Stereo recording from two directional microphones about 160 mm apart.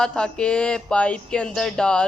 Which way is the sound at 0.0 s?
5° left (ahead or behind).